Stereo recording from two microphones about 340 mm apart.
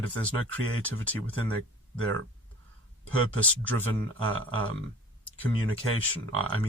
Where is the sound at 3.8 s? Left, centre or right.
Right.